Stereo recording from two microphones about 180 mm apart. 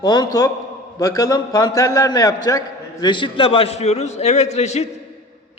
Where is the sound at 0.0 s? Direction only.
20° left (ahead or behind).